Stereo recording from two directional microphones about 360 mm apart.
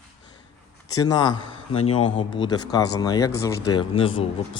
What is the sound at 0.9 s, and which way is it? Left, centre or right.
Speech, centre.